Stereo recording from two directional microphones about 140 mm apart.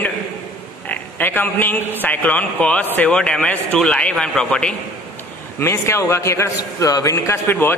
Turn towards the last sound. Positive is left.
turn(degrees=15)  # may be behind; listen again after turning